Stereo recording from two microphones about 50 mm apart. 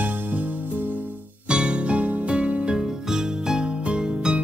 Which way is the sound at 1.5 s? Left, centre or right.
Right.